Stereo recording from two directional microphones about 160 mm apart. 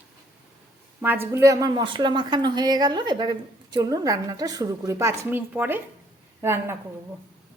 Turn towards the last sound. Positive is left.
turn(degrees=-15)  # may be behind; listen again after turning